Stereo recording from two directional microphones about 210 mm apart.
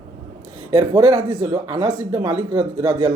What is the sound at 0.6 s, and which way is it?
Speech, 20° right (ahead or behind).